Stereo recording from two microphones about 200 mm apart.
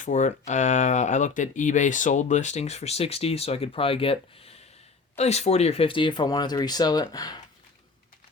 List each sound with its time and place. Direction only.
0.0 s speech: 35° left (ahead or behind); by 7.4 s 20° left (ahead or behind)